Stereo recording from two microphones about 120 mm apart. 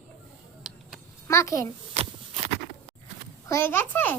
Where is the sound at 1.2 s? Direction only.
25° left (ahead or behind).